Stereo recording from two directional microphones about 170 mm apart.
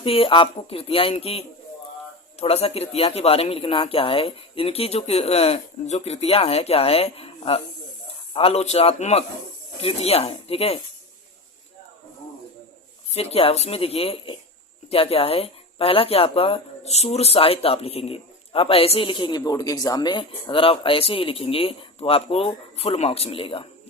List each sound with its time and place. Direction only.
0.0 s speech: 35° left (ahead or behind)
13.1 s speech: 40° left (ahead or behind)